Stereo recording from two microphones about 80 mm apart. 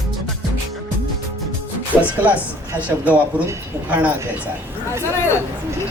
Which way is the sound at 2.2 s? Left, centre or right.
Centre.